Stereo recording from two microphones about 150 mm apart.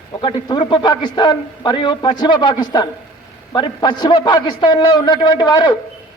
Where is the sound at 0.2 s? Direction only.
30° left (ahead or behind).